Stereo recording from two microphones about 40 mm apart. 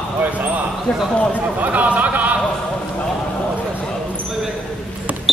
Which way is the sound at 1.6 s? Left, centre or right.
Right.